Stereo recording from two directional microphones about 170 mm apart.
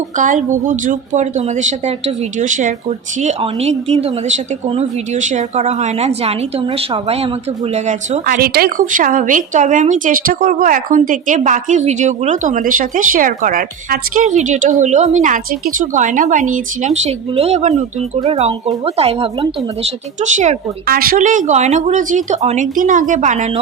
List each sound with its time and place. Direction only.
0.2 s a woman's voice: 50° right (ahead or behind)
8.4 s a woman's voice: 65° right (ahead or behind); by 20.6 s 45° right (ahead or behind)
20.8 s speech: 60° right (ahead or behind); by 23.5 s 45° right (ahead or behind)